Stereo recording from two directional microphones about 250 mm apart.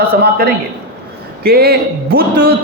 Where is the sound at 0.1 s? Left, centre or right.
Right.